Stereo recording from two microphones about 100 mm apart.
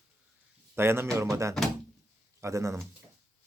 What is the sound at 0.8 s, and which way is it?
Speech, 25° right (ahead or behind).